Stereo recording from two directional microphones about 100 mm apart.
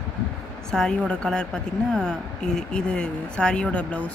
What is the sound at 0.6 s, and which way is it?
A woman's voice, 5° left (ahead or behind).